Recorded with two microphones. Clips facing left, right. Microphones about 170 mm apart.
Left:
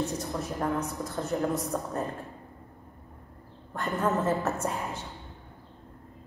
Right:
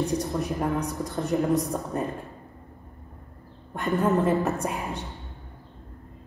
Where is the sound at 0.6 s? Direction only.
15° right (ahead or behind).